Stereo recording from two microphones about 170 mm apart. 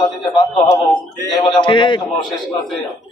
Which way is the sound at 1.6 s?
30° left (ahead or behind).